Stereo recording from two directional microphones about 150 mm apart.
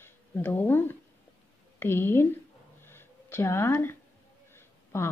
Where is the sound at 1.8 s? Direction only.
15° left (ahead or behind).